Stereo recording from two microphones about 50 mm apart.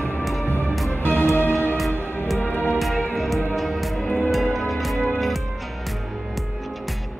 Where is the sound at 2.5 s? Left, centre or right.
Left.